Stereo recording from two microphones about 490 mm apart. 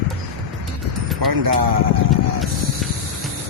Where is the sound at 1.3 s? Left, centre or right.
Right.